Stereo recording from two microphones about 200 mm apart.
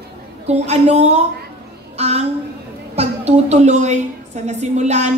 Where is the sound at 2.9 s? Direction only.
35° right (ahead or behind).